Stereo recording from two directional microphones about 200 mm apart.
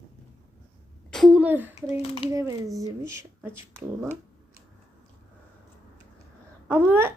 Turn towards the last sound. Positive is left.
turn(degrees=-10)  # may be behind; listen again after turning